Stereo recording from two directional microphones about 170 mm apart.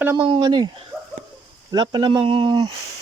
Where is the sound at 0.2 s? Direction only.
30° right (ahead or behind).